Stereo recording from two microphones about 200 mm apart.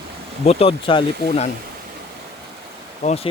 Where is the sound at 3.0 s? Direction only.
35° left (ahead or behind).